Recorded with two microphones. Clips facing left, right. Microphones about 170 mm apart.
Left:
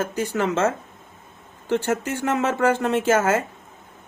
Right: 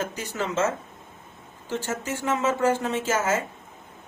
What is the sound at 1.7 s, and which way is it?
Speech, 60° left (ahead or behind).